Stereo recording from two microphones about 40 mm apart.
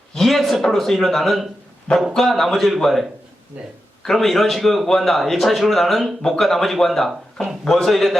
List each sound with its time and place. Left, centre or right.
0.1 s a sound: centre
0.6 s a man's voice: centre
3.6 s speech: right
4.0 s a man's voice: centre
7.9 s a man's voice: centre